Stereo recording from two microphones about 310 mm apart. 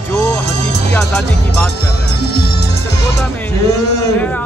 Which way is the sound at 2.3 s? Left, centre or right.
Left.